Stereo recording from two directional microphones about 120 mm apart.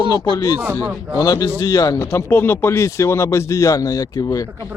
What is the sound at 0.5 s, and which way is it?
Speech, 15° right (ahead or behind).